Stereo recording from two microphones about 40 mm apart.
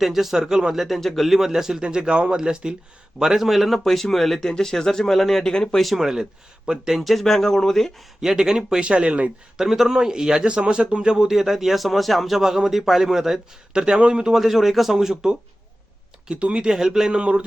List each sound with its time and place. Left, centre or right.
0.0 s speech: centre
0.9 s speech: centre
1.4 s speech: centre
1.8 s speech: right
3.2 s speech: centre
5.8 s speech: centre
7.0 s speech: centre
8.2 s speech: centre
8.8 s speech: right
9.6 s speech: centre
13.7 s speech: right
14.3 s speech: centre; by 16.7 s right
16.7 s speech: centre
17.2 s speech: right